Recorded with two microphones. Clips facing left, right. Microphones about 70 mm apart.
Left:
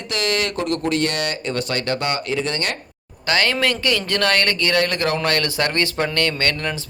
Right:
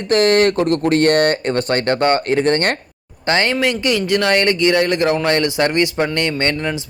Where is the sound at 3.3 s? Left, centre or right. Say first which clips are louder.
Right 3 dB; right.